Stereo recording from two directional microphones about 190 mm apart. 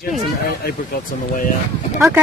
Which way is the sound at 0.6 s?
50° left (ahead or behind).